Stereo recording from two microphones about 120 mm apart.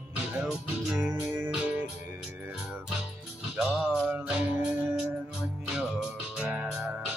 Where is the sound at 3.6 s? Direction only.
Centre (ahead or behind).